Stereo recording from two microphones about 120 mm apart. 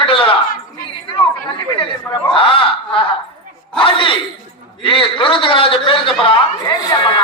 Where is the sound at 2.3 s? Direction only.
45° left (ahead or behind).